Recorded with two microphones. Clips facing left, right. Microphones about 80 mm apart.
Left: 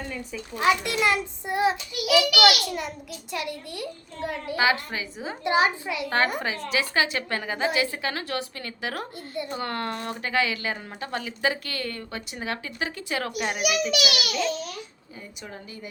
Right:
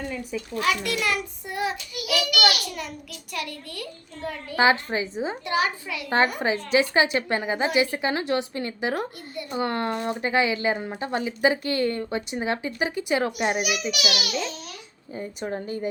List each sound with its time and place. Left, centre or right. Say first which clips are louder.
0.1 s speech: right 3 dB; centre
0.3 s a child's voice: left 3 dB; left
2.3 s a child's voice: left 1 dB; left
3.3 s a child's voice: left 1 dB; left
4.5 s speech: right 4 dB; right
5.5 s a child's voice: left 5 dB; left
6.1 s speech: right 4 dB; right
14.0 s a child's voice: left 1 dB; centre
15.1 s a woman's voice: right 11 dB; right